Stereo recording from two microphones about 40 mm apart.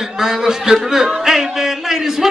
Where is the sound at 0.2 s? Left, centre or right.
Centre.